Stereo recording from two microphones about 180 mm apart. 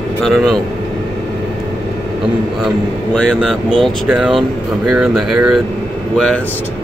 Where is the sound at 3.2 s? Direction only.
5° left (ahead or behind).